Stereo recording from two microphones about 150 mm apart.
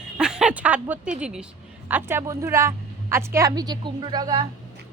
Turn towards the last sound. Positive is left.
turn(degrees=-30)  # may be behind; listen again after turning